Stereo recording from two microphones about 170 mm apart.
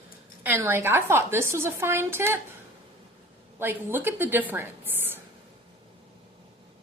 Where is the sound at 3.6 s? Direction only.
15° right (ahead or behind).